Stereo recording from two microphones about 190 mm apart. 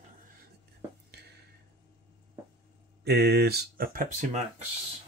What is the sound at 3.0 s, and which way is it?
Speech, 60° right (ahead or behind).